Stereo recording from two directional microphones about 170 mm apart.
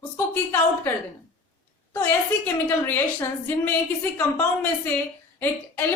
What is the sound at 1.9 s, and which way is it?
A woman's voice, 15° left (ahead or behind).